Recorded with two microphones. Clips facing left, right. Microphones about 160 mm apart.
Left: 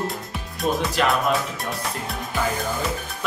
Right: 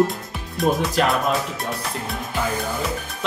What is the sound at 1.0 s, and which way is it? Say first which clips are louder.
Speech: right 1 dB; 40° right (ahead or behind).